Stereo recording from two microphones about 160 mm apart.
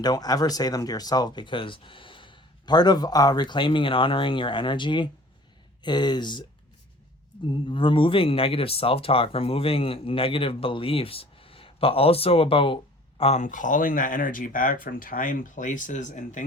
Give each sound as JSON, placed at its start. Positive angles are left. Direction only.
{"t": 0.0, "sound": "speech", "side_deg": 25}
{"t": 7.5, "sound": "speech", "side_deg": 30}